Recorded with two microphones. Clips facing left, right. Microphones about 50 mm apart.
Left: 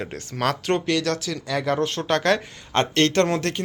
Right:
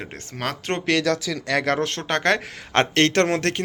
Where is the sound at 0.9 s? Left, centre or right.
Right.